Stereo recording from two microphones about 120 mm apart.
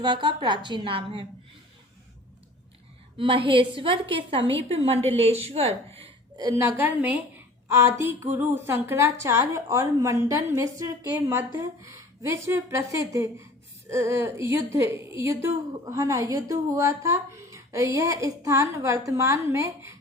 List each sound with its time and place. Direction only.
0.0 s a woman's voice: 40° right (ahead or behind)
3.2 s a woman's voice: 45° right (ahead or behind)
6.3 s a woman's voice: 30° right (ahead or behind)